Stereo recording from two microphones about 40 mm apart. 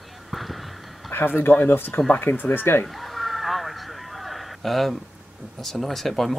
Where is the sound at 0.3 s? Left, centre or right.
Centre.